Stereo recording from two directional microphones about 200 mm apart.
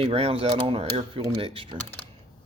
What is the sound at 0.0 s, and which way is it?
Speech, 30° right (ahead or behind).